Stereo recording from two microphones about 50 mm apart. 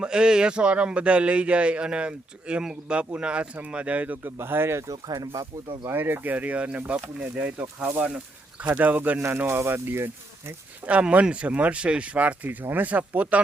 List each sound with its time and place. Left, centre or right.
0.0 s a man's voice: centre; by 4.3 s right
4.4 s speech: right
5.9 s a man's voice: right
9.6 s speech: right
10.8 s a man's voice: right